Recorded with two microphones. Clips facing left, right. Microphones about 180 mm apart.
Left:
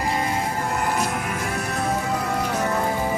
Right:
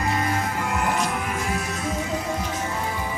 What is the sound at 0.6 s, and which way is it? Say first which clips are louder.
Music: even; 40° left (ahead or behind).